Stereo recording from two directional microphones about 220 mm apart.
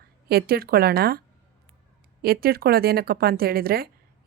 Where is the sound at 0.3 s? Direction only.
45° right (ahead or behind).